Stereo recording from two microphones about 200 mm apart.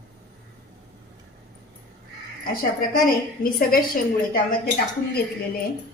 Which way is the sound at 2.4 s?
45° left (ahead or behind).